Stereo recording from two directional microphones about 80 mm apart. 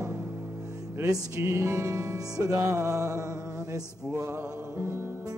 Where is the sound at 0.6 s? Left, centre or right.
Right.